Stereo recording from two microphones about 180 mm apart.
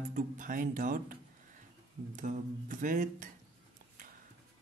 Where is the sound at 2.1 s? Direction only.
45° right (ahead or behind).